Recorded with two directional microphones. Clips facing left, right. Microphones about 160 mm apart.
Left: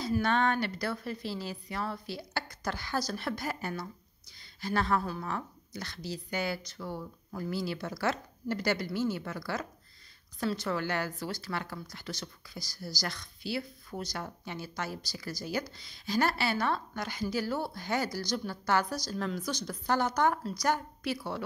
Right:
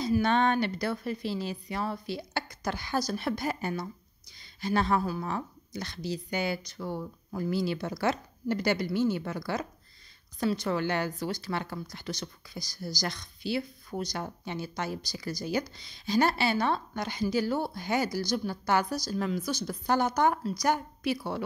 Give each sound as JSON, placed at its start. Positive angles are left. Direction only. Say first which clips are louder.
{"t": 0.0, "sound": "speech", "louder": "right 3 dB", "side_deg": -20}